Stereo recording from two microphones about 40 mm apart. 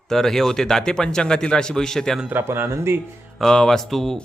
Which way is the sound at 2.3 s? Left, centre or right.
Right.